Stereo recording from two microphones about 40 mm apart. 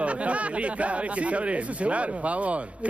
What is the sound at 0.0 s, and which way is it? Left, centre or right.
Speech, right.